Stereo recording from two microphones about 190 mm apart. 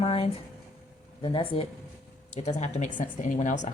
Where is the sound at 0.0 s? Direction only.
30° left (ahead or behind).